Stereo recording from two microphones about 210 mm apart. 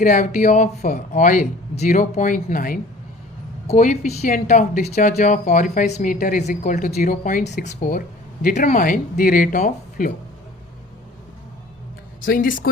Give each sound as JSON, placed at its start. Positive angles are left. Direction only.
{"t": 0.0, "sound": "speech", "side_deg": 40}
{"t": 12.2, "sound": "speech", "side_deg": 40}